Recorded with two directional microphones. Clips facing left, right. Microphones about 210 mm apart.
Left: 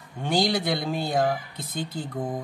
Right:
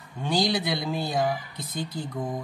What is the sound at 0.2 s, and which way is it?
Speech, 50° left (ahead or behind).